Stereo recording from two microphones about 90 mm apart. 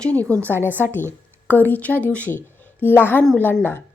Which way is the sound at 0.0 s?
15° left (ahead or behind).